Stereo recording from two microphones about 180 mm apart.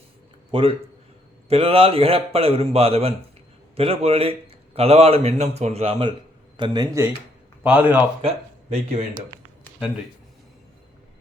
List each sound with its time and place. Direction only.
0.5 s a man's voice: 30° right (ahead or behind)
6.6 s speech: 20° right (ahead or behind)
7.6 s a man's voice: 10° right (ahead or behind)
8.7 s a man's voice: 35° right (ahead or behind)